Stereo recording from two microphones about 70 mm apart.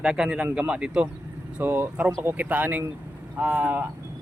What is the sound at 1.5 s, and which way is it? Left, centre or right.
Speech, right.